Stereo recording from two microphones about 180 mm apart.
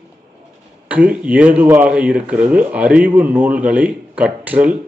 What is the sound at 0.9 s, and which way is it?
Speech, 10° right (ahead or behind).